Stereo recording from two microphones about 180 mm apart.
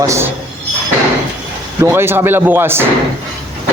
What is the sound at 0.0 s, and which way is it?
Speech, 15° right (ahead or behind).